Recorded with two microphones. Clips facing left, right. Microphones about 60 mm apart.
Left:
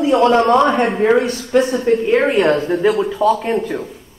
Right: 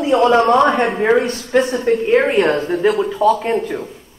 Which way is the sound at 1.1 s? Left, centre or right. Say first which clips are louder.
Even; right.